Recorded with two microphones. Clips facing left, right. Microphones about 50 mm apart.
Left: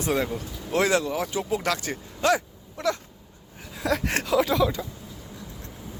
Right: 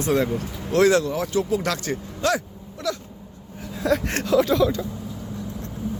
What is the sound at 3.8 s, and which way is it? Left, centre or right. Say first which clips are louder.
Speech: right 3 dB; centre.